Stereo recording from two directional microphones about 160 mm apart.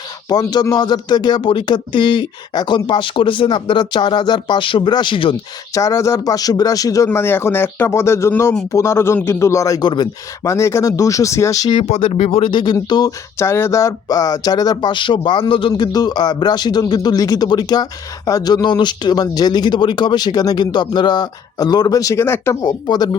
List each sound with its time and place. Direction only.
0.3 s speech: 25° left (ahead or behind)
5.7 s speech: 20° left (ahead or behind)
11.8 s speech: 35° left (ahead or behind); by 22.7 s 15° left (ahead or behind)